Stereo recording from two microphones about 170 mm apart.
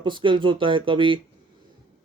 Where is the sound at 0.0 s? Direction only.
30° right (ahead or behind).